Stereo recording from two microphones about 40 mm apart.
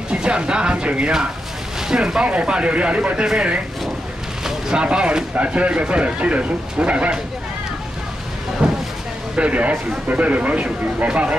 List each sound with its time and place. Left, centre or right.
0.1 s speech: right
1.8 s speech: centre
4.5 s boat: centre
4.8 s speech: right
9.3 s speech: right